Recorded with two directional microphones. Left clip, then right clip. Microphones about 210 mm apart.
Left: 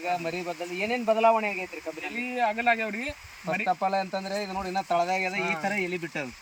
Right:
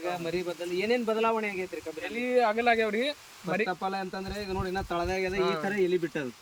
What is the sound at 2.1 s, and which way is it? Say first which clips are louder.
Speech: right 2 dB; 20° right (ahead or behind).